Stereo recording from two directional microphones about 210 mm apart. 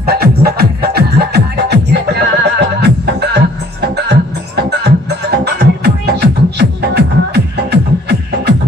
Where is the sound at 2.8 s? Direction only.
50° right (ahead or behind).